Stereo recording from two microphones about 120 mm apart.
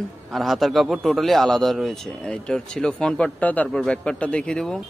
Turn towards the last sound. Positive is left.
turn(degrees=5)  # may be behind; listen again after turning